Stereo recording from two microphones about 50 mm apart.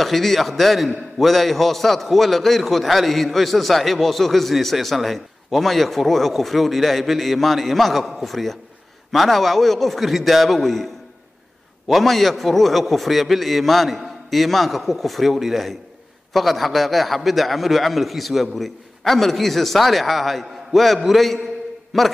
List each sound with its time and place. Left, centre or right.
0.0 s a man's voice: centre
11.9 s a man's voice: centre